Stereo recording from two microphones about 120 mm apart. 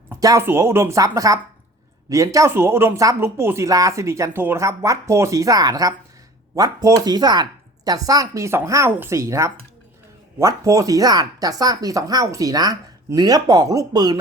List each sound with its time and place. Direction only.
0.2 s speech: 25° right (ahead or behind)